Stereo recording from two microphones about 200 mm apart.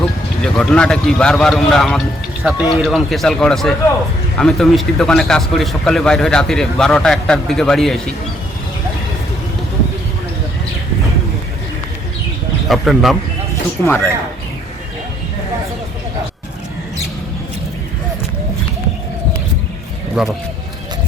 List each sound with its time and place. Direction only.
0.0 s a man's voice: centre (ahead or behind)
12.6 s a man's voice: centre (ahead or behind)
13.8 s a man's voice: 15° left (ahead or behind)
20.2 s a man's voice: 5° right (ahead or behind)